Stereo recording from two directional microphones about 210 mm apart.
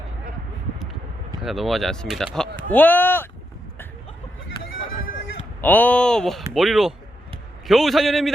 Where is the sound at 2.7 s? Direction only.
10° left (ahead or behind).